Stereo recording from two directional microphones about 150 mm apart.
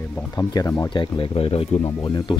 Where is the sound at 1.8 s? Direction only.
25° left (ahead or behind).